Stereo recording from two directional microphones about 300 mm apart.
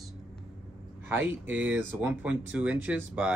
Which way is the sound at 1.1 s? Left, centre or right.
Centre.